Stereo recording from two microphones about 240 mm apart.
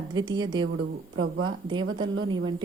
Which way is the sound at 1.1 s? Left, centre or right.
Right.